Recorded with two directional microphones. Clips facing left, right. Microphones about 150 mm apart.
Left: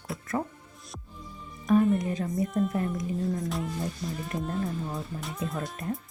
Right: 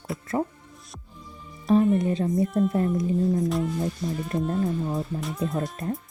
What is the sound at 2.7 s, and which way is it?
Speech, 25° right (ahead or behind).